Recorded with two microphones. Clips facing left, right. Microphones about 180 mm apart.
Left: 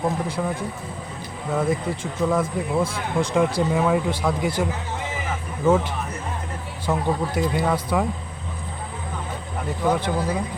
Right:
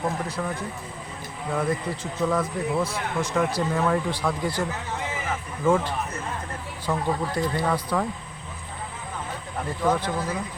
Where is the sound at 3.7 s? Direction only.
10° left (ahead or behind).